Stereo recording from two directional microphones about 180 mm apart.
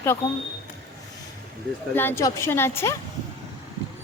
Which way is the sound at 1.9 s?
15° left (ahead or behind).